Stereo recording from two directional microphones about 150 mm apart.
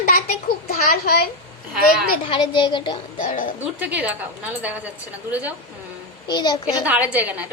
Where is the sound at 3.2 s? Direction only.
60° left (ahead or behind).